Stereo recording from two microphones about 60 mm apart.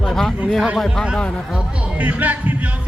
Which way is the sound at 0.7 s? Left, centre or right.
Centre.